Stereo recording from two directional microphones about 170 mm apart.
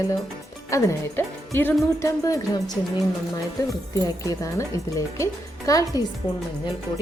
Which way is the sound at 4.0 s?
20° left (ahead or behind).